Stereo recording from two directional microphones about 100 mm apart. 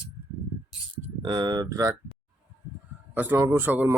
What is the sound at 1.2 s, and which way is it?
Speech, 45° right (ahead or behind).